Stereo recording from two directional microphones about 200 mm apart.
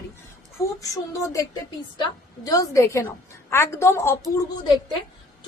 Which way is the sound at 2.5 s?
15° left (ahead or behind).